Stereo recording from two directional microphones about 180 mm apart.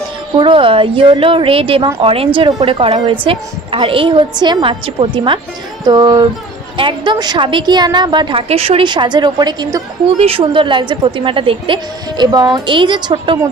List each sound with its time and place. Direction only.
0.4 s a woman's voice: 30° right (ahead or behind)
10.0 s a woman's voice: 35° right (ahead or behind)